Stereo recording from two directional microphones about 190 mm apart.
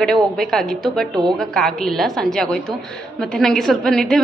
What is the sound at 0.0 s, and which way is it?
A woman's voice, centre (ahead or behind).